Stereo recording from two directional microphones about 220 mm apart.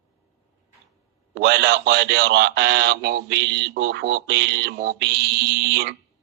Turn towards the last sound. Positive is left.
turn(degrees=-50)  # may be behind; listen again after turning